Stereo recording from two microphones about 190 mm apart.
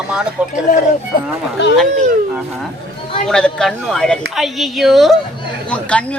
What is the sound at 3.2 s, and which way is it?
A man's voice, 5° left (ahead or behind).